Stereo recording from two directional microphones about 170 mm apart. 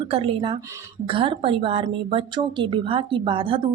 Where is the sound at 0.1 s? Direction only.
35° right (ahead or behind).